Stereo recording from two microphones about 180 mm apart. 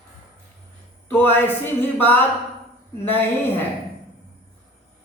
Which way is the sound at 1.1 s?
10° left (ahead or behind).